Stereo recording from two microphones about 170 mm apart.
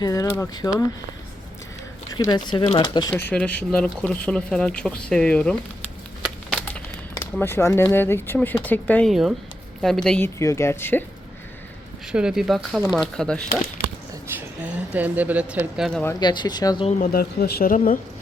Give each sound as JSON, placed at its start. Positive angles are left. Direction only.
{"t": 0.0, "sound": "speech", "side_deg": 20}
{"t": 2.1, "sound": "speech", "side_deg": 25}
{"t": 6.2, "sound": "a sound", "side_deg": 5}
{"t": 7.1, "sound": "speech", "side_deg": 15}
{"t": 12.1, "sound": "speech", "side_deg": -5}
{"t": 14.3, "sound": "speech", "side_deg": -10}
{"t": 16.2, "sound": "speech", "side_deg": 25}
{"t": 17.0, "sound": "speech", "side_deg": 60}